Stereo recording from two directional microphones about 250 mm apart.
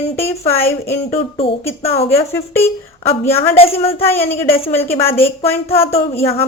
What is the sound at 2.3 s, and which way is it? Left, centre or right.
Speech, centre.